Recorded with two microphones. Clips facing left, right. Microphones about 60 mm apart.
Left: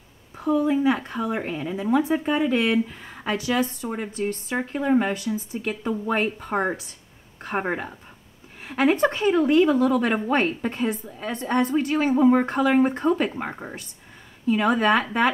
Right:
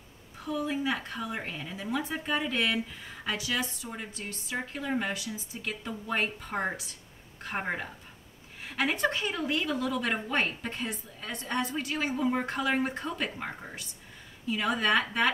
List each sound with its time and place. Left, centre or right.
0.4 s a woman's voice: left
5.7 s a woman's voice: left
8.9 s a woman's voice: left